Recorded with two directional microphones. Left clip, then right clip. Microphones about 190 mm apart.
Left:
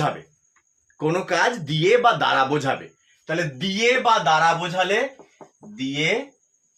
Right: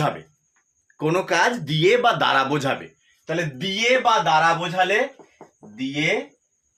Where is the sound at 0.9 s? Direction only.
20° right (ahead or behind).